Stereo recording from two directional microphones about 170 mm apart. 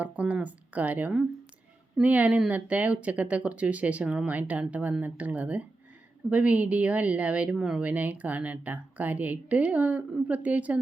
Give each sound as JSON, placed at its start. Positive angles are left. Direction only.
{"t": 0.0, "sound": "speech", "side_deg": -10}